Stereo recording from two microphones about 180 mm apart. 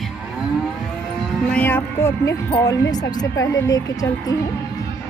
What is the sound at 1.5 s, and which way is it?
Speech, 10° left (ahead or behind).